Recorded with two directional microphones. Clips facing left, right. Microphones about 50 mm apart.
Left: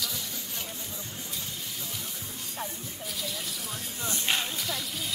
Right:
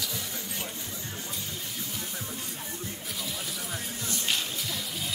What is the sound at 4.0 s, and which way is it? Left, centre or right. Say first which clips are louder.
Music: left 3 dB; left.